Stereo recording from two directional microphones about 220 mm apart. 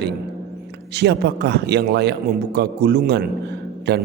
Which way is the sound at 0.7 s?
50° right (ahead or behind).